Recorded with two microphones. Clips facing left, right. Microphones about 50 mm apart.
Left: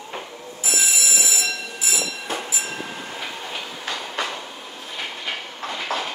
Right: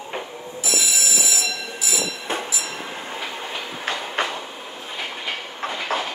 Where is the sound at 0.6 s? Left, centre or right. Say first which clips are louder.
Even; left.